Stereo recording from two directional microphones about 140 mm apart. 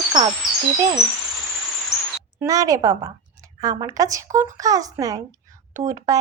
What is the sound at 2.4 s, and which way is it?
A woman's voice, 25° right (ahead or behind).